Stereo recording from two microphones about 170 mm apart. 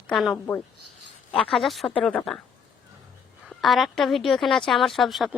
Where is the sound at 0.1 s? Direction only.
Centre (ahead or behind).